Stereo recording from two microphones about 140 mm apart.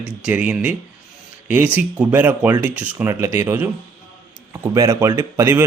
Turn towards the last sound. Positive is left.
turn(degrees=-15)  # may be behind; listen again after turning